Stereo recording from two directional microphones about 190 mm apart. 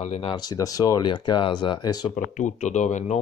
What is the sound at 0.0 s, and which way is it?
Speech, 35° left (ahead or behind).